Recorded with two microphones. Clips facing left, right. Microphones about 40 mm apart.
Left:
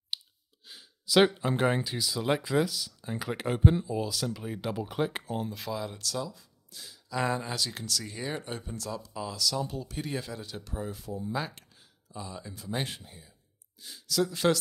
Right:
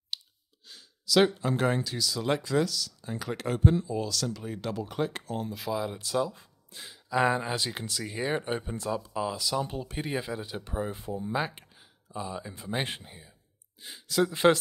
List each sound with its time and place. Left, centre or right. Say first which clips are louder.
0.1 s clicking: left 1 dB; centre
0.7 s speech: right 2 dB; centre
5.5 s speech: right 3 dB; centre
6.0 s speech: right 6 dB; right